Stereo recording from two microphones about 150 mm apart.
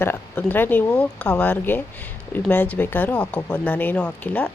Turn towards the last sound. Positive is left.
turn(degrees=10)  # may be behind; listen again after turning